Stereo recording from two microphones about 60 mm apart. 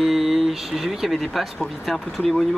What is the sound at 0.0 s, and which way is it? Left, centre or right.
Speech, centre.